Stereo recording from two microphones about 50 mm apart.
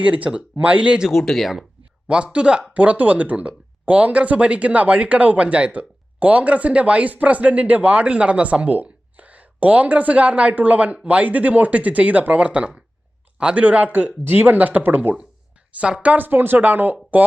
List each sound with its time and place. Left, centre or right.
0.0 s speech: right
1.1 s speech: centre
2.0 s speech: right
2.7 s speech: right
15.7 s speech: right
16.0 s speech: right